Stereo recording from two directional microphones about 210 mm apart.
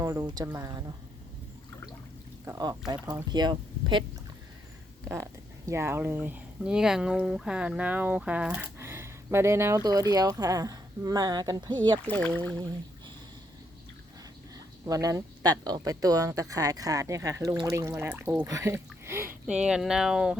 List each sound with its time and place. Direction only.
0.0 s speech: 15° right (ahead or behind)
2.4 s speech: 15° right (ahead or behind)
5.0 s speech: 15° right (ahead or behind)
12.0 s speech: 5° left (ahead or behind)
14.8 s speech: 15° right (ahead or behind)